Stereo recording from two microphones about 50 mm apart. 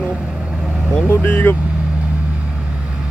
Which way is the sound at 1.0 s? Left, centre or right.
Left.